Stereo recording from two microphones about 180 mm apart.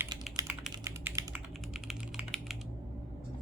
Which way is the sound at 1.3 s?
5° right (ahead or behind).